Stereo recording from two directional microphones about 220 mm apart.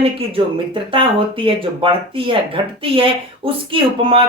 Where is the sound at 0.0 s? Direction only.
25° right (ahead or behind).